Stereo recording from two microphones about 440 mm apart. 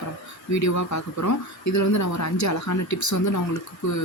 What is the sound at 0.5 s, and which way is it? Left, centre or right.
Speech, left.